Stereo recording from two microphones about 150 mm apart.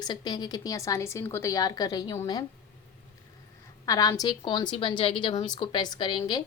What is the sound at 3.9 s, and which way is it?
A woman's voice, 25° left (ahead or behind).